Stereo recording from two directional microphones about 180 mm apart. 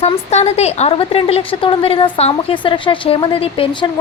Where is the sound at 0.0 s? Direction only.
35° left (ahead or behind).